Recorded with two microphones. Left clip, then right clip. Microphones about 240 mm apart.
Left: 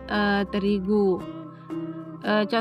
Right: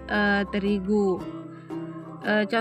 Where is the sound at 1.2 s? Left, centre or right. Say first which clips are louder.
Right 1 dB; centre.